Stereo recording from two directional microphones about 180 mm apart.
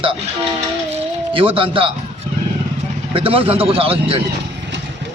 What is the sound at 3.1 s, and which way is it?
Speech, 30° right (ahead or behind).